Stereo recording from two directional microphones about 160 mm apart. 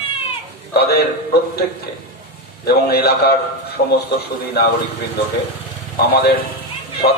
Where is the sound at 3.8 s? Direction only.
90° left.